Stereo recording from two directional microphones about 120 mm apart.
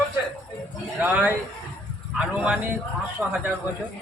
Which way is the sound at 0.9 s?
15° right (ahead or behind).